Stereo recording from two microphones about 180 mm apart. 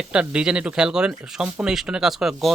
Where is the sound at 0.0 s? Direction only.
5° right (ahead or behind).